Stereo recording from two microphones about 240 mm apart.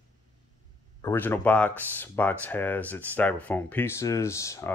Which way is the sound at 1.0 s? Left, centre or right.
Centre.